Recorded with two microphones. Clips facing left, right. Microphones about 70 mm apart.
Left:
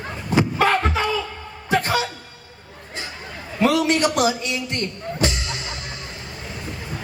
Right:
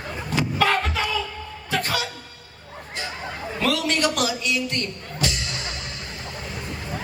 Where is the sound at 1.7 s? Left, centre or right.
Left.